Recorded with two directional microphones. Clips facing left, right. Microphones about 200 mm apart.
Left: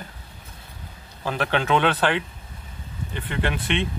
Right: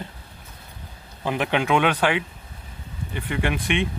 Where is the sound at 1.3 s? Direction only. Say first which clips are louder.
Right 1 dB; 15° right (ahead or behind).